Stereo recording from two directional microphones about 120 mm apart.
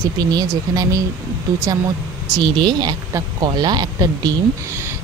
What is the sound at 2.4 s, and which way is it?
A woman's voice, 40° right (ahead or behind).